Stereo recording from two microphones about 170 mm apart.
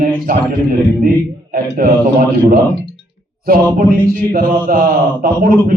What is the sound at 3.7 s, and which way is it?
A man's voice, 55° right (ahead or behind).